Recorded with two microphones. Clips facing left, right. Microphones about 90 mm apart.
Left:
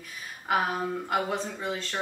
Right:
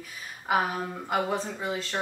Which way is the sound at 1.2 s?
Centre (ahead or behind).